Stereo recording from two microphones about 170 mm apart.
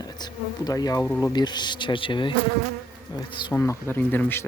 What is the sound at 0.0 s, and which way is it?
Speech, 25° left (ahead or behind).